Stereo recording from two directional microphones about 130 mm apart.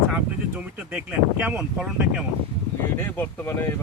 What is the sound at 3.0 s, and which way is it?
Speech, 15° left (ahead or behind).